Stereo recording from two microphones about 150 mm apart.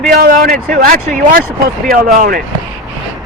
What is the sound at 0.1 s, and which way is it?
Speech, 75° right (ahead or behind).